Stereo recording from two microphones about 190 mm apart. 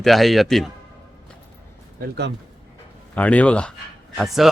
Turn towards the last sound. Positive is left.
turn(degrees=0)  # may be behind; listen again after turning